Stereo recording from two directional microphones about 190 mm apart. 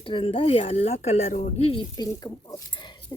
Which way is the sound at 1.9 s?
20° left (ahead or behind).